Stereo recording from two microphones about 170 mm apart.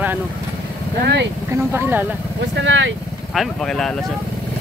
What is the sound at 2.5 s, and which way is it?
Speech, 90° right.